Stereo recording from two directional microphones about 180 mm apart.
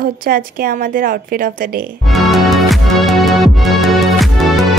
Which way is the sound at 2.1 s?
Centre (ahead or behind).